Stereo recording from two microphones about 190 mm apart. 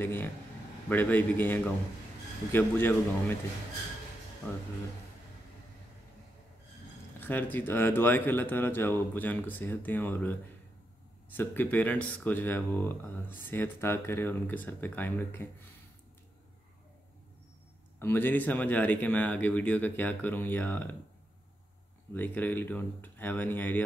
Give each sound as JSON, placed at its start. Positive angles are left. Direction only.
{"t": 0.0, "sound": "speech", "side_deg": 10}
{"t": 7.2, "sound": "speech", "side_deg": 10}
{"t": 11.3, "sound": "speech", "side_deg": 10}
{"t": 17.9, "sound": "speech", "side_deg": 10}
{"t": 22.1, "sound": "speech", "side_deg": 10}